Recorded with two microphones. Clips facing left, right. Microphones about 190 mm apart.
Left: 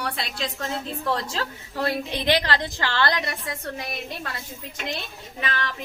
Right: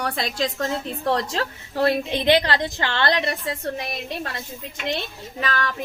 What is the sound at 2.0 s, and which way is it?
A woman's voice, 20° right (ahead or behind).